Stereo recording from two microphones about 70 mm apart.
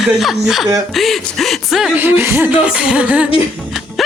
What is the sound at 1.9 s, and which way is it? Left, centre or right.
Speech, right.